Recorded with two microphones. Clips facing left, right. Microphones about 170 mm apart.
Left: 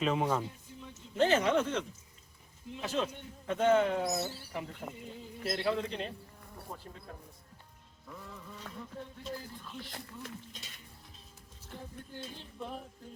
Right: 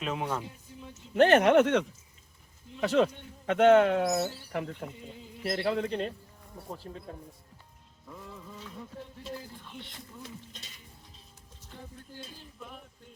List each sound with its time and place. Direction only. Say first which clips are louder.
0.0 s speech: left 3 dB; centre (ahead or behind)
1.1 s speech: right 7 dB; 70° right (ahead or behind)
2.8 s a man's voice: right 9 dB; 70° right (ahead or behind); by 6.1 s 55° right (ahead or behind)
8.0 s music: right 2 dB; 15° right (ahead or behind)
12.4 s a sound: left 5 dB; 30° left (ahead or behind)